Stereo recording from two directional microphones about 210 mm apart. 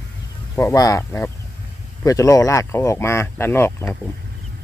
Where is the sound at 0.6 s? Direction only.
15° left (ahead or behind).